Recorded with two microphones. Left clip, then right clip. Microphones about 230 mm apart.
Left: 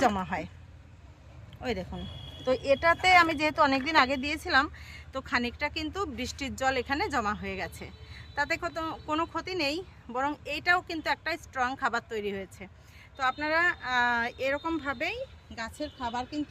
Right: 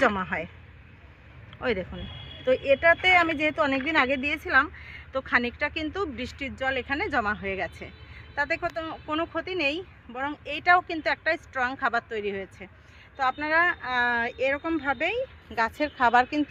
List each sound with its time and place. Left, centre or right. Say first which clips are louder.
0.0 s speech: right 3 dB; centre
1.6 s speech: right 6 dB; centre
15.8 s speech: right 13 dB; right